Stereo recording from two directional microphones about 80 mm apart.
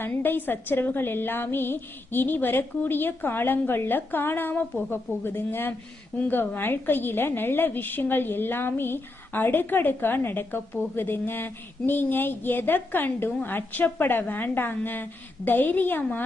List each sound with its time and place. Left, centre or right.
0.0 s a woman's voice: left